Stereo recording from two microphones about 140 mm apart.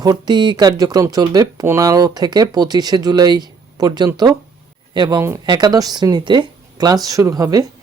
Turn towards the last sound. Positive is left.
turn(degrees=-25)  # may be behind; listen again after turning